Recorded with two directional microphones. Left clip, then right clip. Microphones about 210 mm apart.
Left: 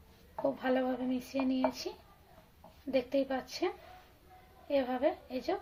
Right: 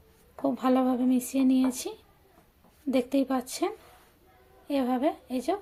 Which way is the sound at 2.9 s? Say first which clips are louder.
Right 5 dB; 40° right (ahead or behind).